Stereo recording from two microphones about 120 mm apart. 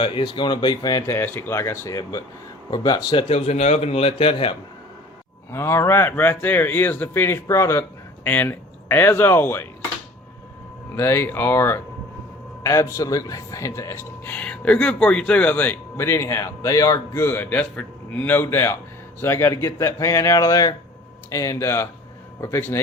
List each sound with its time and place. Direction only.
0.0 s a man's voice: 45° left (ahead or behind)
5.5 s speech: 20° left (ahead or behind)
10.9 s speech: 20° left (ahead or behind)